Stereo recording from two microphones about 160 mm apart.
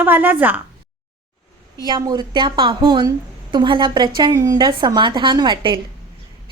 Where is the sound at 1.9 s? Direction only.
25° right (ahead or behind).